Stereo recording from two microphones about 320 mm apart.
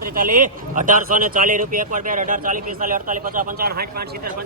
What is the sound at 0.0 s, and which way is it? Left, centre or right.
Speech, right.